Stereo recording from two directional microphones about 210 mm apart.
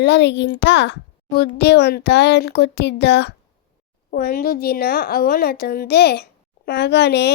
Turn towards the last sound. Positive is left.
turn(degrees=55)  # may be behind; listen again after turning